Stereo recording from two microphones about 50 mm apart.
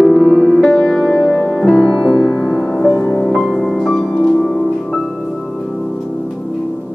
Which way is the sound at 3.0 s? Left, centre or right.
Left.